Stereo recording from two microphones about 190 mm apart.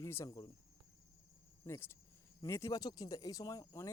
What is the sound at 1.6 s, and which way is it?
Speech, 15° left (ahead or behind).